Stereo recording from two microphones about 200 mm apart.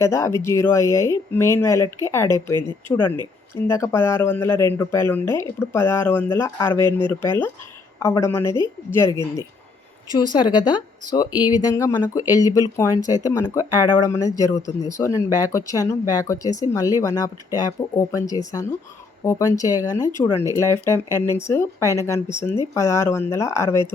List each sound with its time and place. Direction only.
0.0 s speech: 15° left (ahead or behind)
2.5 s speech: 20° right (ahead or behind)
3.7 s speech: 15° left (ahead or behind)